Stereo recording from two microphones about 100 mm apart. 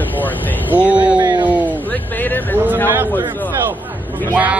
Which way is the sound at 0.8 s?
15° right (ahead or behind).